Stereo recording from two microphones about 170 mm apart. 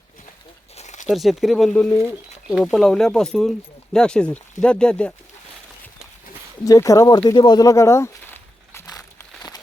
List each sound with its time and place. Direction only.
0.8 s crumpling: 45° left (ahead or behind)
1.0 s speech: centre (ahead or behind)
6.7 s speech: 20° left (ahead or behind)
7.3 s a sound: 25° left (ahead or behind)